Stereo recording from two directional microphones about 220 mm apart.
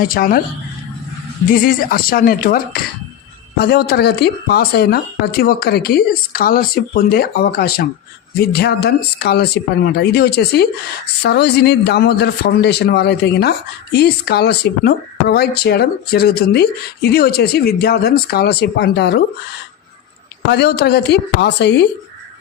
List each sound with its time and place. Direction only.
0.0 s speech: 40° left (ahead or behind)
1.5 s a man's voice: 40° left (ahead or behind)
20.5 s a man's voice: 50° left (ahead or behind)